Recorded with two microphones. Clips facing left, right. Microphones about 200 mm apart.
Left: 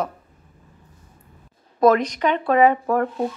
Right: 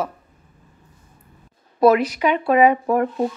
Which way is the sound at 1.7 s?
10° right (ahead or behind).